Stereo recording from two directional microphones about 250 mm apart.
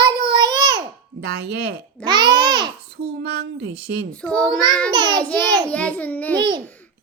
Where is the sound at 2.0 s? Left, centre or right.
Centre.